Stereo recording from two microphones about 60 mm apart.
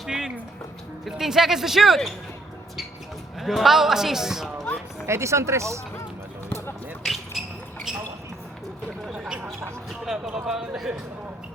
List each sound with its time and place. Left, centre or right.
0.1 s speech: centre
3.4 s a man's voice: centre
5.0 s speech: right
7.0 s basketball bounce: centre
9.0 s a sound: centre